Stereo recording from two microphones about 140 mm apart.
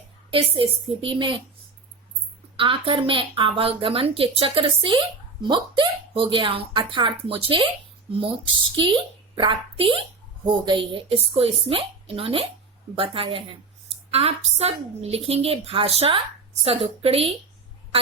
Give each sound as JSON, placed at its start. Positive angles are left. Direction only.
{"t": 0.3, "sound": "a woman's voice", "side_deg": -40}
{"t": 2.6, "sound": "a woman's voice", "side_deg": -40}
{"t": 9.3, "sound": "a woman's voice", "side_deg": -35}